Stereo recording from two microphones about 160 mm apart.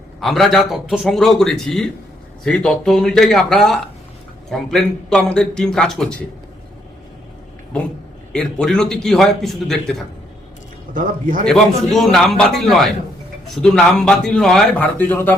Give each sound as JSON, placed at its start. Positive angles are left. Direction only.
{"t": 0.2, "sound": "a man's voice", "side_deg": 0}
{"t": 8.3, "sound": "a man's voice", "side_deg": 5}
{"t": 10.9, "sound": "a man's voice", "side_deg": -55}
{"t": 11.4, "sound": "a man's voice", "side_deg": 0}